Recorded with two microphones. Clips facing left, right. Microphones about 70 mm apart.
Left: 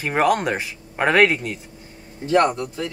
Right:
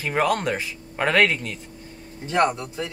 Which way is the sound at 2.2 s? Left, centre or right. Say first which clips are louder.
Left 3 dB; centre.